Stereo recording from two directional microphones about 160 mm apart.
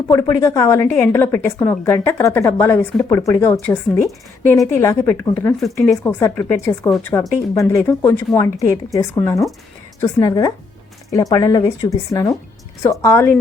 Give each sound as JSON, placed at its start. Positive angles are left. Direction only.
{"t": 0.1, "sound": "a woman's voice", "side_deg": 15}
{"t": 5.5, "sound": "speech", "side_deg": 0}
{"t": 6.0, "sound": "a woman's voice", "side_deg": 15}